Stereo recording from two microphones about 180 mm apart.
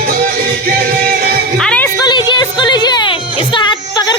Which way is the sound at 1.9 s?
25° left (ahead or behind).